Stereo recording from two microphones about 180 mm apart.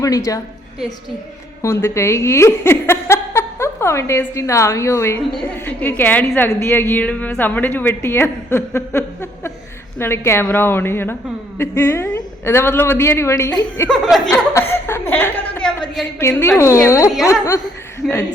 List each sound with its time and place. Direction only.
0.0 s a woman's voice: 20° left (ahead or behind)
1.6 s a woman's voice: 15° left (ahead or behind)
13.9 s speech: centre (ahead or behind)
14.3 s chuckle: 15° left (ahead or behind)
16.2 s a woman's voice: 10° left (ahead or behind)